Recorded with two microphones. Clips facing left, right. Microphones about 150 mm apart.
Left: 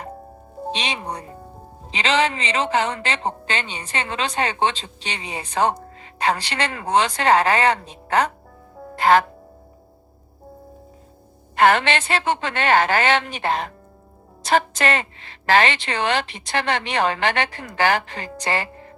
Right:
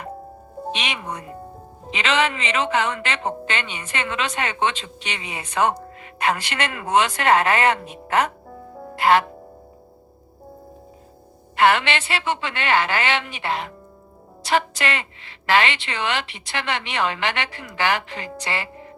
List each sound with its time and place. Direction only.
0.7 s speech: 35° left (ahead or behind)
11.5 s a woman's voice: 45° left (ahead or behind)